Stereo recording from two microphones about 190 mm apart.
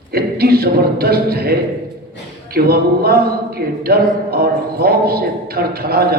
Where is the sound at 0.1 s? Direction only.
55° right (ahead or behind).